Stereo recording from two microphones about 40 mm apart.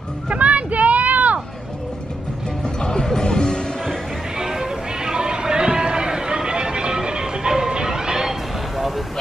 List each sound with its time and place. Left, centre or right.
0.3 s a sound: right
2.6 s music: left
4.4 s music: centre
8.7 s vehicle: centre